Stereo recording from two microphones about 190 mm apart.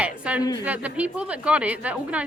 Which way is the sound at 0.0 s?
5° right (ahead or behind).